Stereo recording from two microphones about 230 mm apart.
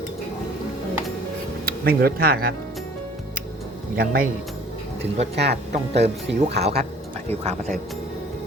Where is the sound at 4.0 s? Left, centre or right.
Right.